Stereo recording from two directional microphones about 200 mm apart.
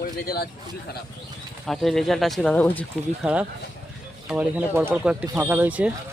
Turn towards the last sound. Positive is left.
turn(degrees=-5)  # may be behind; listen again after turning